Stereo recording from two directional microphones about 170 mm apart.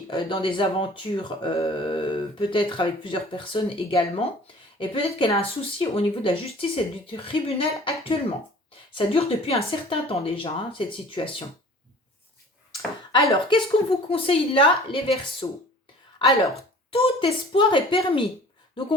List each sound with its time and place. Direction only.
0.1 s speech: 30° left (ahead or behind)
9.0 s speech: 35° left (ahead or behind)
12.7 s a sound: 20° left (ahead or behind)
14.1 s speech: 35° left (ahead or behind)